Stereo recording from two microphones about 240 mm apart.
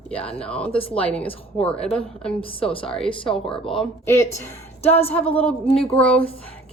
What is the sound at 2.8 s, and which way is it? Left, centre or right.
Speech, centre.